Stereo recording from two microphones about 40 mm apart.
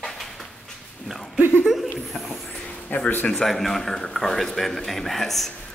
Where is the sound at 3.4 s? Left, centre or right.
Centre.